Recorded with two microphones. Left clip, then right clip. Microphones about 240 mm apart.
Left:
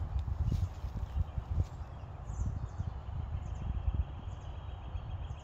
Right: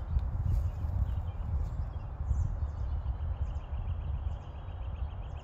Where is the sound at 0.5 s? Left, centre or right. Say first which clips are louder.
Left 6 dB; centre.